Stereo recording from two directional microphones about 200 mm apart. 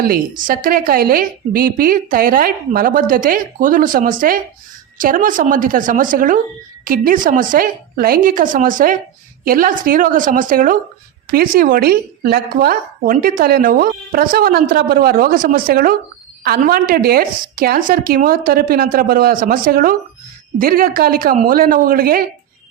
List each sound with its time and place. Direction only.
0.0 s a woman's voice: 45° right (ahead or behind)